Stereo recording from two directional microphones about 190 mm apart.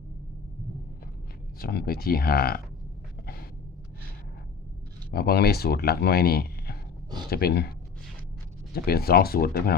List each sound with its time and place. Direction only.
1.5 s speech: 50° left (ahead or behind)
5.1 s speech: 55° left (ahead or behind)
8.7 s speech: 55° left (ahead or behind)